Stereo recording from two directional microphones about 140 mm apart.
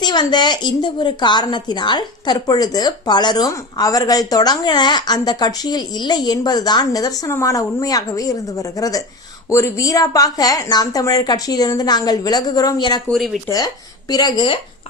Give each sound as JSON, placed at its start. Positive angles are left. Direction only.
{"t": 0.0, "sound": "a woman's voice", "side_deg": 30}
{"t": 13.1, "sound": "speech", "side_deg": 0}
{"t": 14.1, "sound": "a woman's voice", "side_deg": 30}